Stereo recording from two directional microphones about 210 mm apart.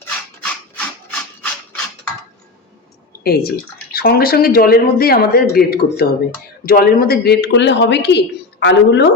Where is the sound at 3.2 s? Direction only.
45° left (ahead or behind).